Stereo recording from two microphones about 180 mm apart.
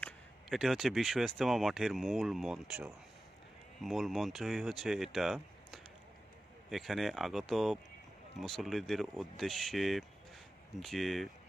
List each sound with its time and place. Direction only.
0.5 s speech: centre (ahead or behind)
3.8 s speech: centre (ahead or behind)